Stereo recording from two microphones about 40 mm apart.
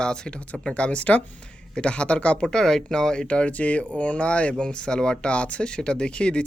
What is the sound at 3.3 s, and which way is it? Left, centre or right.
Speech, left.